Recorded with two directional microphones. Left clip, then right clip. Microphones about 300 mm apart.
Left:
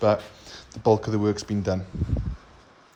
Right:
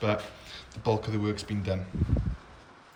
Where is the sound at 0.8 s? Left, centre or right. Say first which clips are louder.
Left 8 dB; left.